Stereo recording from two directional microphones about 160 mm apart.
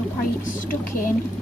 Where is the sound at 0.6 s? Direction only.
60° left (ahead or behind).